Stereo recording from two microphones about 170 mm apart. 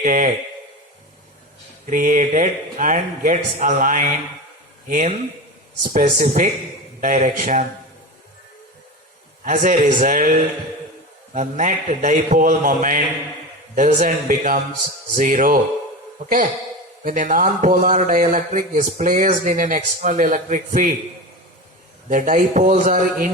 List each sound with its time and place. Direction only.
0.0 s a man's voice: 50° right (ahead or behind)
1.9 s a man's voice: 50° right (ahead or behind)
9.4 s a man's voice: 50° right (ahead or behind)
11.3 s a man's voice: 45° right (ahead or behind)
17.0 s a man's voice: 50° right (ahead or behind)
22.1 s a man's voice: 50° right (ahead or behind)